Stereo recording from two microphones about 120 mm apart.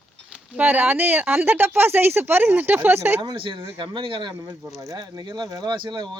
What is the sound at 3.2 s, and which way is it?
A woman's voice, 45° right (ahead or behind).